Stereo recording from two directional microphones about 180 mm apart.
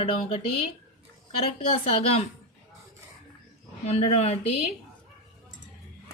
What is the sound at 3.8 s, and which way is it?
Speech, 35° left (ahead or behind).